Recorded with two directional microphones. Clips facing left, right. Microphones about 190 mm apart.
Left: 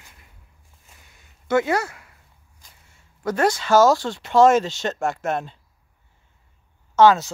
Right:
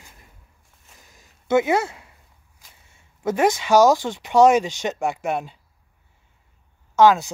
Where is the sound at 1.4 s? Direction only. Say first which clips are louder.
Right 2 dB; 20° right (ahead or behind).